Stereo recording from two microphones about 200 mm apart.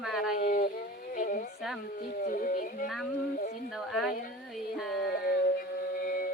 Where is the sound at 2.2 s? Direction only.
40° left (ahead or behind).